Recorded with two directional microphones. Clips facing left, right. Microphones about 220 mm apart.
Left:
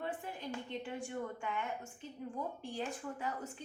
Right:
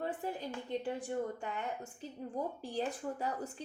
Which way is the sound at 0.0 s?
40° right (ahead or behind).